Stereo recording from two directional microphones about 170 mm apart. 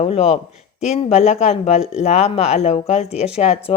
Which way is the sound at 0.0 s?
35° left (ahead or behind).